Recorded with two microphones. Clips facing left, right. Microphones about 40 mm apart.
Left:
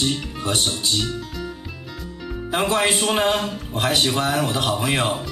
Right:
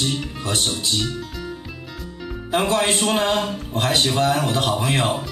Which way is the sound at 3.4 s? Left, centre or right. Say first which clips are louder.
Right 1 dB; centre.